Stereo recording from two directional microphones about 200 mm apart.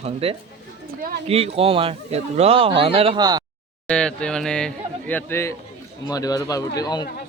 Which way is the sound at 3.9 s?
5° left (ahead or behind).